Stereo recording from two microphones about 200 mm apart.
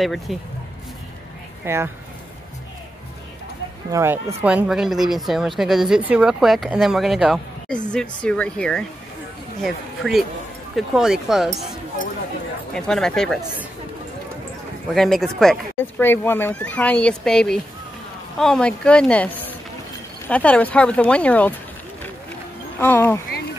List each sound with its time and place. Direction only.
0.0 s a woman's voice: centre (ahead or behind)
1.6 s speech: 10° right (ahead or behind)
3.9 s a woman's voice: 10° right (ahead or behind)
12.7 s a woman's voice: 5° left (ahead or behind)
15.0 s a woman's voice: centre (ahead or behind)
22.8 s speech: 10° left (ahead or behind)